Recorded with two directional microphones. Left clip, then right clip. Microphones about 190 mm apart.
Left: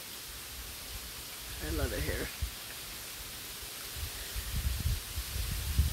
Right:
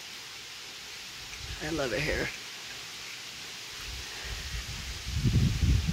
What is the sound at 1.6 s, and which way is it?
Speech, 15° right (ahead or behind).